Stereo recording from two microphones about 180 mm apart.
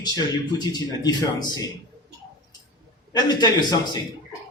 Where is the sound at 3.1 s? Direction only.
25° left (ahead or behind).